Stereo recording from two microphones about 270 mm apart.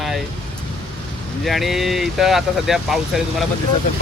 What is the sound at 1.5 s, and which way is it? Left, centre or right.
Speech, centre.